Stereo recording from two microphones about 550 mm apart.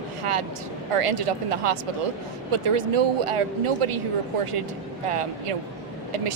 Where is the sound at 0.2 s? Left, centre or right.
Right.